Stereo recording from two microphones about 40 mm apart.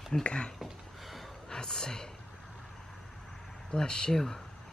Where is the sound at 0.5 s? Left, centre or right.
Centre.